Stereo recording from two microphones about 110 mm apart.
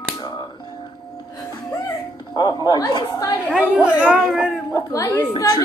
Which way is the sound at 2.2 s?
40° left (ahead or behind).